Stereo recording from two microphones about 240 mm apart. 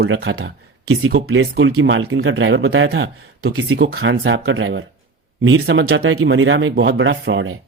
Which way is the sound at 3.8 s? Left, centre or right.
Right.